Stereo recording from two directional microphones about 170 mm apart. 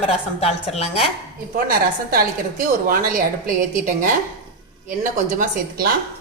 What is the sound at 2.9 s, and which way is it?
A woman's voice, 55° right (ahead or behind).